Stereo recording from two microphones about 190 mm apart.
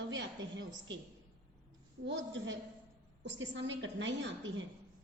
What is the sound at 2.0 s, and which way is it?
A woman's voice, 75° right (ahead or behind).